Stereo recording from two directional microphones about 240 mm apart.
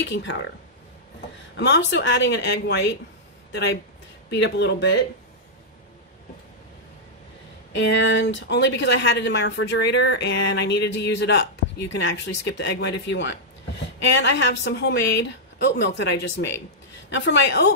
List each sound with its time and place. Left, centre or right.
0.0 s speech: left
1.6 s speech: left
4.3 s speech: left
7.7 s speech: left